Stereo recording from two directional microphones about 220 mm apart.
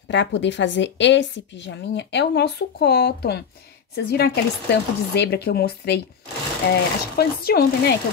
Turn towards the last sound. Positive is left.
turn(degrees=45)  # may be behind; listen again after turning